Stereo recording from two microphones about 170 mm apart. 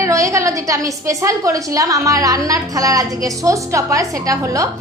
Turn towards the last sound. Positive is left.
turn(degrees=-20)  # may be behind; listen again after turning